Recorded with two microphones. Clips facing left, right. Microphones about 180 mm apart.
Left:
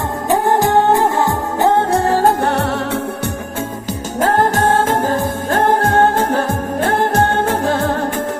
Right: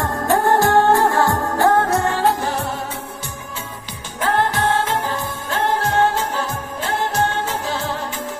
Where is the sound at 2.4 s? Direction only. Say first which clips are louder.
Left 6 dB; 65° left (ahead or behind).